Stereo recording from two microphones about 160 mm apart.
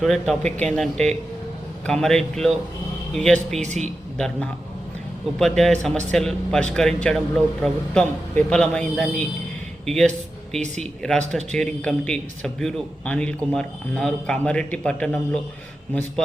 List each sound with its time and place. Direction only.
0.0 s speech: centre (ahead or behind)
3.6 s a man's voice: 45° right (ahead or behind)
5.4 s speech: centre (ahead or behind)